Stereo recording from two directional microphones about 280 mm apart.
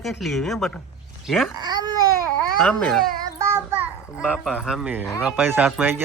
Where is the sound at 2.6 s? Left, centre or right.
Centre.